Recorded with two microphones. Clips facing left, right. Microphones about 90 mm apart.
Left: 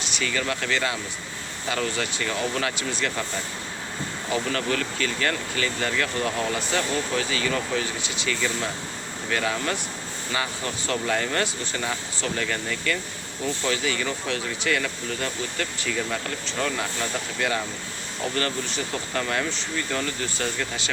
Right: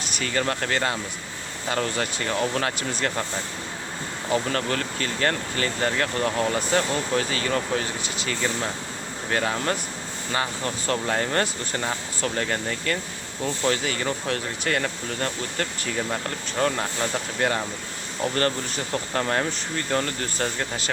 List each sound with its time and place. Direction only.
0.0 s speech: 45° right (ahead or behind)
4.3 s speech: 40° right (ahead or behind)
19.1 s speech: 35° right (ahead or behind)